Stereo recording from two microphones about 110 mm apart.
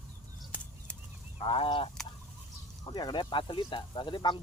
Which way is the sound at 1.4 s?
55° left (ahead or behind).